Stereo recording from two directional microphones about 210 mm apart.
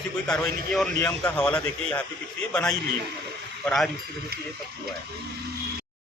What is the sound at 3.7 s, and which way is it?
Speech, centre (ahead or behind).